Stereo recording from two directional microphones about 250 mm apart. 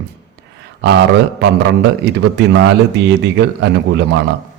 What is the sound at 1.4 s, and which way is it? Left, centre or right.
Speech, right.